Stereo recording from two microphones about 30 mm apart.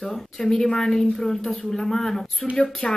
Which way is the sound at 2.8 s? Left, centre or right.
Left.